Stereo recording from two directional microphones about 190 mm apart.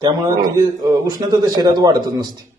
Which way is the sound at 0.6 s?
20° right (ahead or behind).